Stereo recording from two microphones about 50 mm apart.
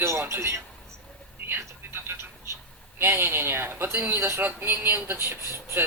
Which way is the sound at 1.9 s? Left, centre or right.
Right.